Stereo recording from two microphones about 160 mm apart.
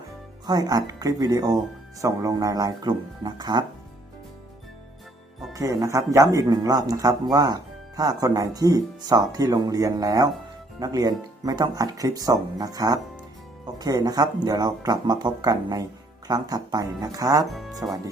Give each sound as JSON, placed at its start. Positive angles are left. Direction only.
{"t": 0.4, "sound": "speech", "side_deg": -25}
{"t": 5.5, "sound": "speech", "side_deg": -20}
{"t": 17.5, "sound": "speech", "side_deg": 0}